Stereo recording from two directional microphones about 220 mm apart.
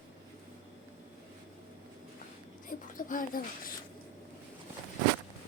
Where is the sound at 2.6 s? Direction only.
35° left (ahead or behind).